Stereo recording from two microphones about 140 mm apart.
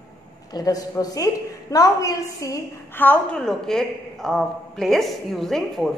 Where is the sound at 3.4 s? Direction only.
Centre (ahead or behind).